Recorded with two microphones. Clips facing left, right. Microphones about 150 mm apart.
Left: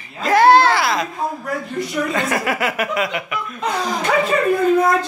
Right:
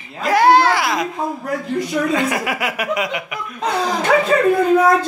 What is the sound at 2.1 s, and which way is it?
Speech, 10° right (ahead or behind).